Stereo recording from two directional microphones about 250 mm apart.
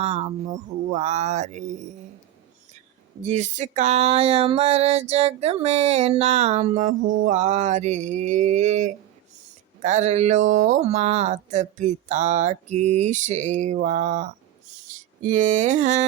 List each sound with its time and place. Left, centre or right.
0.0 s speech: right
3.2 s speech: right